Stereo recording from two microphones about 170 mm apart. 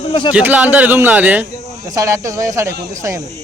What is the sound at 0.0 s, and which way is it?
Speech, 30° left (ahead or behind).